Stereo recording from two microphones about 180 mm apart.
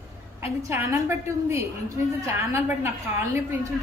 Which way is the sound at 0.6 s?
15° right (ahead or behind).